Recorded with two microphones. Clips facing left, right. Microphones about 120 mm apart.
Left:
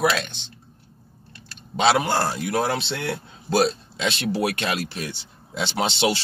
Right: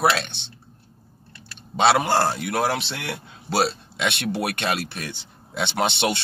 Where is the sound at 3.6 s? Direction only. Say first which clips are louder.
Left 1 dB; 65° right (ahead or behind).